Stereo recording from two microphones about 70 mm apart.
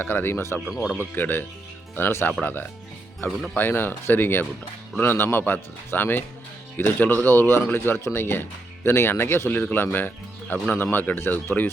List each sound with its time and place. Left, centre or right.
0.0 s a man's voice: left